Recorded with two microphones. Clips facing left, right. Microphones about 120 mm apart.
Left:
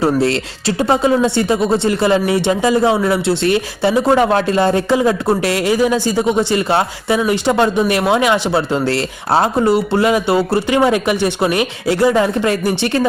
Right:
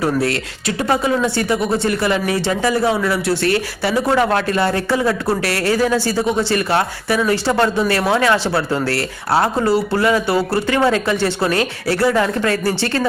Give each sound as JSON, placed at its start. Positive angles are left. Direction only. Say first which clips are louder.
{"t": 0.0, "sound": "speech", "louder": "left 4 dB", "side_deg": 25}